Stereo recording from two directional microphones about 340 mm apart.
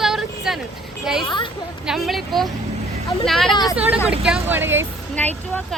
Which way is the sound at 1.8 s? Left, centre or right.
Centre.